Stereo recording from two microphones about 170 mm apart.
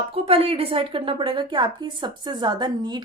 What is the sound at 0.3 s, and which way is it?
A woman's voice, 35° right (ahead or behind).